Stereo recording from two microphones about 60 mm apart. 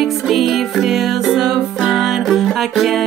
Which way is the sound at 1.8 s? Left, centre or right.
Centre.